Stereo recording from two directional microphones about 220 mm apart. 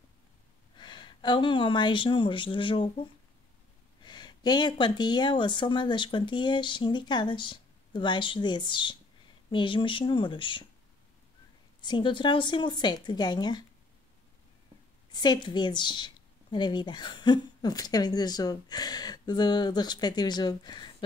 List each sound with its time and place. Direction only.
0.7 s speech: 20° left (ahead or behind)
4.0 s a woman's voice: 20° left (ahead or behind)
11.8 s a woman's voice: 20° left (ahead or behind)
15.1 s a woman's voice: 20° left (ahead or behind)